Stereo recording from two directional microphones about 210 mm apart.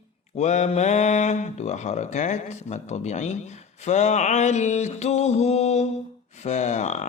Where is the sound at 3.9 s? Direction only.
35° left (ahead or behind).